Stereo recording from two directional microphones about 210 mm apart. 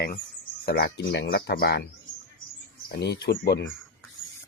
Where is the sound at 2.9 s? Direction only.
50° left (ahead or behind).